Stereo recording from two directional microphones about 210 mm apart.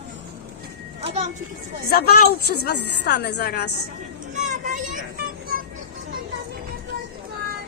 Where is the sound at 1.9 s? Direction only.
50° left (ahead or behind).